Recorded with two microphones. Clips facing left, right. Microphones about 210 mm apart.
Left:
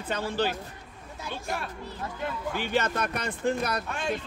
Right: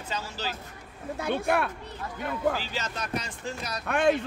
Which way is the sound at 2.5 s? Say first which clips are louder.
Left 6 dB; 60° left (ahead or behind).